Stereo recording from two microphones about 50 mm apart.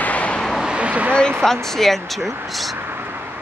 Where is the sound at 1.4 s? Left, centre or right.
Centre.